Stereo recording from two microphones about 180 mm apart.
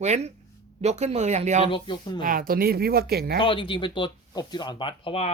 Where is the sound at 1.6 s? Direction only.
25° left (ahead or behind).